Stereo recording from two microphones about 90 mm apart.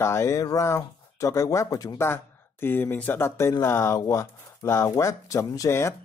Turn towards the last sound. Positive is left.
turn(degrees=35)  # may be behind; listen again after turning